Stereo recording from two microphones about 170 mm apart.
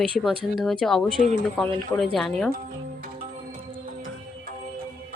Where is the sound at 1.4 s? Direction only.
5° left (ahead or behind).